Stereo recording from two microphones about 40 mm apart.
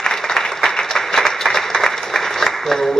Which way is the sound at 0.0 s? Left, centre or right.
Centre.